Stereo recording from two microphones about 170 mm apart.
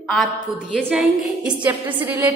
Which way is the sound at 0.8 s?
5° right (ahead or behind).